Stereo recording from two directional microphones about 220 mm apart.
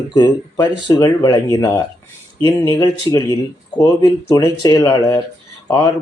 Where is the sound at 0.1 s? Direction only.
20° left (ahead or behind).